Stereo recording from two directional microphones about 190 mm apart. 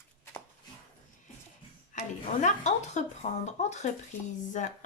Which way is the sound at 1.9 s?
40° left (ahead or behind).